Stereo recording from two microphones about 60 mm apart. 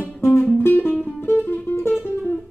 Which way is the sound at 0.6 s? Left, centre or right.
Left.